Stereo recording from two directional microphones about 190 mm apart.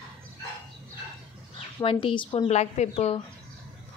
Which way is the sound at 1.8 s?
30° left (ahead or behind).